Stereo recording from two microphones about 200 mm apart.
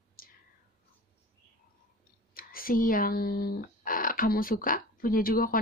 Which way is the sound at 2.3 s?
45° left (ahead or behind).